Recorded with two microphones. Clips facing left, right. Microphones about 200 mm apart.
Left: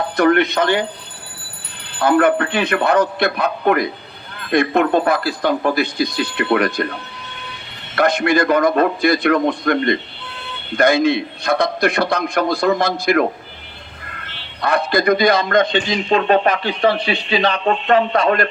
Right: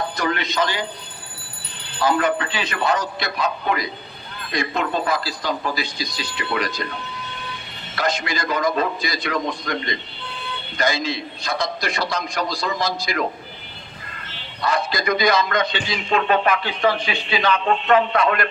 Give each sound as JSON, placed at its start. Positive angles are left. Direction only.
{"t": 0.2, "sound": "a man's voice", "side_deg": 60}
{"t": 2.0, "sound": "a man's voice", "side_deg": 60}
{"t": 7.9, "sound": "a man's voice", "side_deg": 60}